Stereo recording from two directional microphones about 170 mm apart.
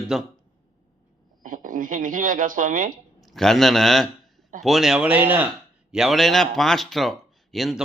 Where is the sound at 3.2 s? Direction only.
Centre (ahead or behind).